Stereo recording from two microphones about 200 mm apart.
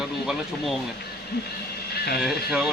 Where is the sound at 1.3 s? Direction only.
55° left (ahead or behind).